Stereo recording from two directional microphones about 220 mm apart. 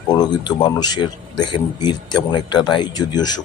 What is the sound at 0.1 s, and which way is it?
Speech, 20° left (ahead or behind).